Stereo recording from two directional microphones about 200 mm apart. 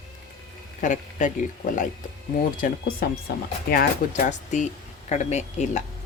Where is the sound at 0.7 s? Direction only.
40° left (ahead or behind).